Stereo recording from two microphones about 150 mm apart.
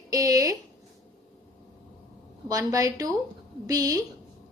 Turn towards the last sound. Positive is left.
turn(degrees=-25)  # may be behind; listen again after turning